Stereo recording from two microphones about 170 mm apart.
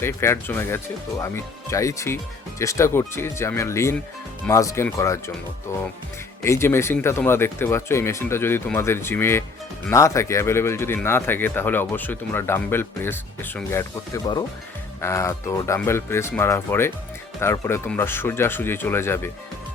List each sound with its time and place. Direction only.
0.0 s speech: 15° left (ahead or behind)
6.4 s speech: 15° left (ahead or behind)